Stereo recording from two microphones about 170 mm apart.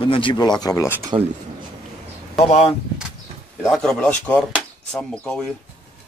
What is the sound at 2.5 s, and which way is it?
Speech, 35° left (ahead or behind).